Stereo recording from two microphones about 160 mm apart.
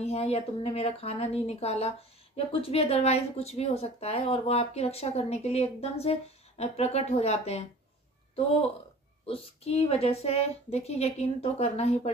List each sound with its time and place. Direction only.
0.0 s speech: 40° left (ahead or behind)
9.2 s speech: 35° left (ahead or behind)